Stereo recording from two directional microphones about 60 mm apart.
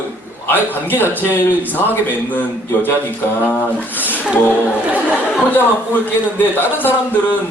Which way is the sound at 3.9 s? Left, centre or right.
Left.